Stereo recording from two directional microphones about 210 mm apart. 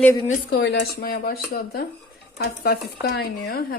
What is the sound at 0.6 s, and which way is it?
Speech, 55° left (ahead or behind).